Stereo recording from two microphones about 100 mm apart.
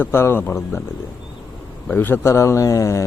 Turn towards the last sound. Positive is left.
turn(degrees=30)  # may be behind; listen again after turning